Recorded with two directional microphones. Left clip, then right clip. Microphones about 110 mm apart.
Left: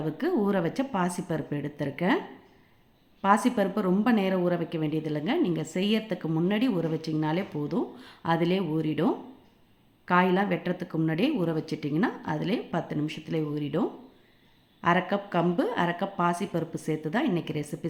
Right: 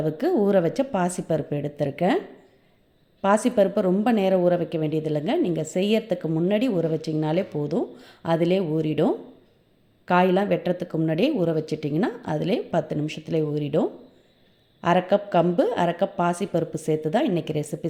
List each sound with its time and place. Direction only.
0.0 s a woman's voice: 35° right (ahead or behind)
3.2 s a woman's voice: 30° right (ahead or behind)